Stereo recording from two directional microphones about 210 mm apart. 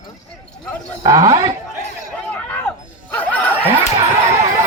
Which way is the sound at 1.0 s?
15° right (ahead or behind).